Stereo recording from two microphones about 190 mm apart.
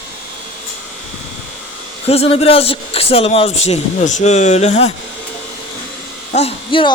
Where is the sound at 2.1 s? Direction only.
30° left (ahead or behind).